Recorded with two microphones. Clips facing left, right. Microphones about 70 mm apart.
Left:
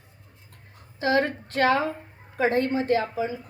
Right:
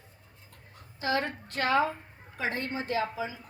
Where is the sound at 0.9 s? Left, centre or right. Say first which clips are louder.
Left 7 dB; left.